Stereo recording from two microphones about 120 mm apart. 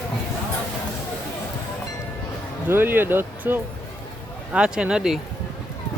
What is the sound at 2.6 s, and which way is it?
Speech, 15° right (ahead or behind).